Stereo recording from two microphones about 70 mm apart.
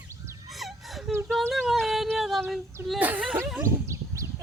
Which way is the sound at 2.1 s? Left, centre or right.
Centre.